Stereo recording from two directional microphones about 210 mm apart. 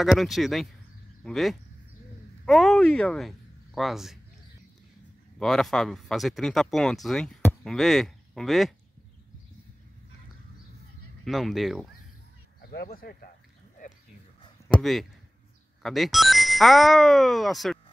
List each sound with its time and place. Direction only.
0.0 s speech: centre (ahead or behind)
5.4 s speech: centre (ahead or behind)
11.2 s speech: centre (ahead or behind)
12.7 s speech: 45° left (ahead or behind)
14.7 s speech: centre (ahead or behind)